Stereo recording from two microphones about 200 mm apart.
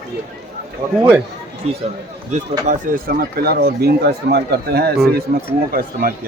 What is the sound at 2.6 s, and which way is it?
Speech, 45° right (ahead or behind).